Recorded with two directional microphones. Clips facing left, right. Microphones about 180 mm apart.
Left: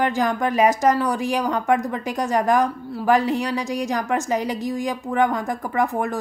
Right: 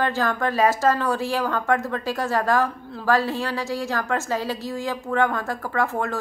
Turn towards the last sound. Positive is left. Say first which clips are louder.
# left 2 dB
turn(degrees=15)  # may be behind; listen again after turning